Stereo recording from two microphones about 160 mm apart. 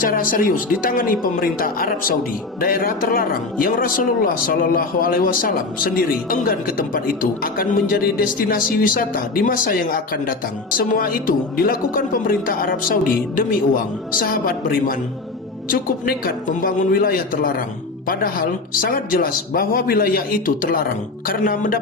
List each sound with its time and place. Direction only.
0.0 s a man's voice: 60° left (ahead or behind)